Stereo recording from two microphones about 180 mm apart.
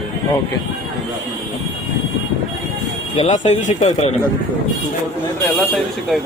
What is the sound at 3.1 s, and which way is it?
Speech, 40° left (ahead or behind).